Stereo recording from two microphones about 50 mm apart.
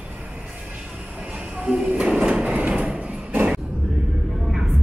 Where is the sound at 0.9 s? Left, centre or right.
Centre.